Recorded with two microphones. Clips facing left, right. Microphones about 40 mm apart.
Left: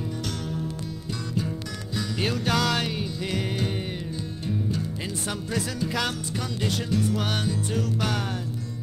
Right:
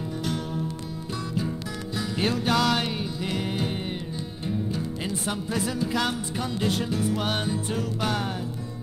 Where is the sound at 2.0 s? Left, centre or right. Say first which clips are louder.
Right 1 dB; centre.